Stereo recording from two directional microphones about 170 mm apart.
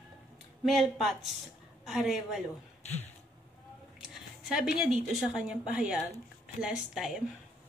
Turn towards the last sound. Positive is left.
turn(degrees=-5)  # may be behind; listen again after turning